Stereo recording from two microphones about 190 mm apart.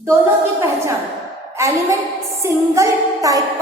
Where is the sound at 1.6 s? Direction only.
15° right (ahead or behind).